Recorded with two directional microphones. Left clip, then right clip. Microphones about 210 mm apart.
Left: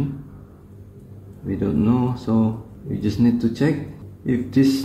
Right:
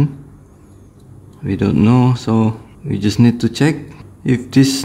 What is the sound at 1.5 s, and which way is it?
Speech, 50° right (ahead or behind).